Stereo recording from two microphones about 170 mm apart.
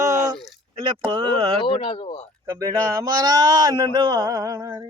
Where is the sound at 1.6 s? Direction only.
30° left (ahead or behind).